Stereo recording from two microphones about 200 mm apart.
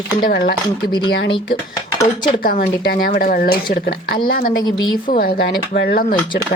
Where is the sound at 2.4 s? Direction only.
45° left (ahead or behind).